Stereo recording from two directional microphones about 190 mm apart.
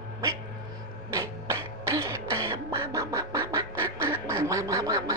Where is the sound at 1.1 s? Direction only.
15° right (ahead or behind).